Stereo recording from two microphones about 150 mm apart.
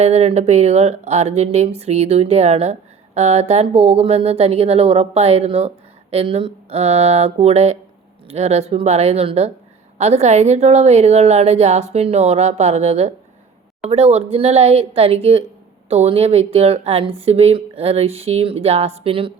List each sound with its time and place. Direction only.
0.0 s speech: 45° right (ahead or behind)